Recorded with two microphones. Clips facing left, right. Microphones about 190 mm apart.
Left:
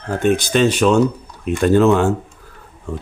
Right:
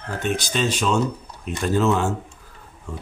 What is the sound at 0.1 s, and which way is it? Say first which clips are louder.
Speech: left 9 dB; 55° left (ahead or behind).